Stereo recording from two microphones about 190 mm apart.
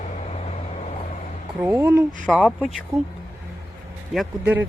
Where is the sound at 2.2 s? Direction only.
5° left (ahead or behind).